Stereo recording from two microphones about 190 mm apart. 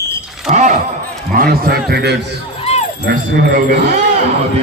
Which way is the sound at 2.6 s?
35° left (ahead or behind).